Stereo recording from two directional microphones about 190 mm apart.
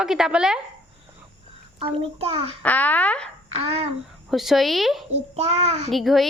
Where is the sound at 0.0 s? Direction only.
5° right (ahead or behind).